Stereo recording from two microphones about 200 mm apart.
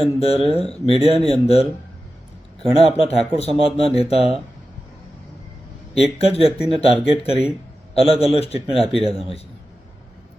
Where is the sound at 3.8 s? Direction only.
30° left (ahead or behind).